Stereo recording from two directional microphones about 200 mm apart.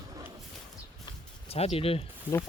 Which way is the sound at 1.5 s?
30° left (ahead or behind).